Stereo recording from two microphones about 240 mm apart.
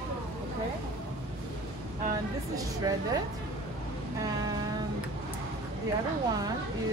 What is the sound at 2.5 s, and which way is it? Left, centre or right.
Speech, centre.